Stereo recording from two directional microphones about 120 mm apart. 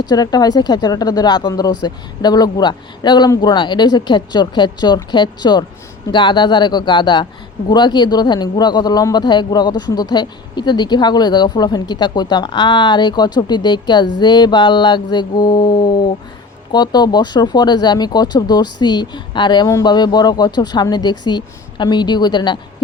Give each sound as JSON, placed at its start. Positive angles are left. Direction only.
{"t": 0.0, "sound": "a man's voice", "side_deg": 35}